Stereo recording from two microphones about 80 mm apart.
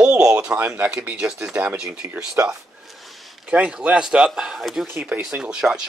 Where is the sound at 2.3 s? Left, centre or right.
Right.